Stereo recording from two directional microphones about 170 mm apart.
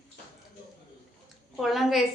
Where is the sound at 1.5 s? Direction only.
Centre (ahead or behind).